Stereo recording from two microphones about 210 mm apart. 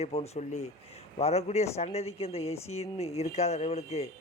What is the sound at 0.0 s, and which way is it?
A man's voice, 30° left (ahead or behind).